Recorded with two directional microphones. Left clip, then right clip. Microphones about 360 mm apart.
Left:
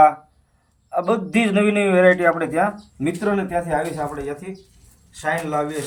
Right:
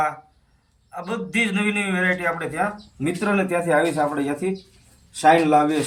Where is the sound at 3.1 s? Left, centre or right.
Centre.